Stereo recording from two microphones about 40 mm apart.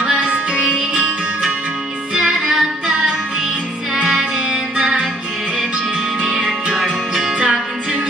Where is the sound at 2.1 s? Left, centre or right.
Right.